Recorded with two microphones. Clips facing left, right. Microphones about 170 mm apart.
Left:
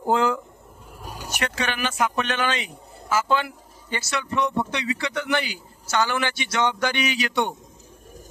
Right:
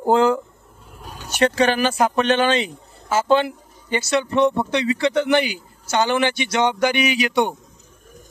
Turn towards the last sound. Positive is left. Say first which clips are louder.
# right 5 dB
turn(degrees=-15)  # may be behind; listen again after turning